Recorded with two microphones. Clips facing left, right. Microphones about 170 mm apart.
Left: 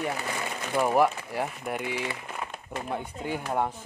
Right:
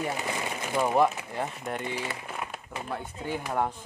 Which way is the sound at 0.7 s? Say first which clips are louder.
Left 1 dB; 5° left (ahead or behind).